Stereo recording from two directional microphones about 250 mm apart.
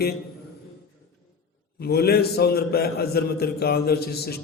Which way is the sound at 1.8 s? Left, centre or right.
Left.